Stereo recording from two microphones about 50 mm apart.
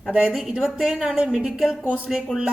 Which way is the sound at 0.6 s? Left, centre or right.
Centre.